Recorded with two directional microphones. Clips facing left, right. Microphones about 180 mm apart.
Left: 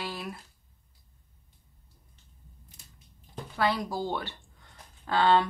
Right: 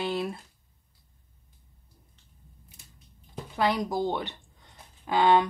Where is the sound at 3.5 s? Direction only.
20° right (ahead or behind).